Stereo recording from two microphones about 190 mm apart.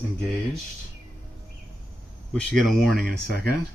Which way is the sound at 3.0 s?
55° right (ahead or behind).